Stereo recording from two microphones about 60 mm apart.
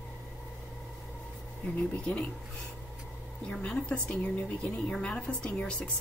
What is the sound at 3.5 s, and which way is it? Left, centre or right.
A woman's voice, centre.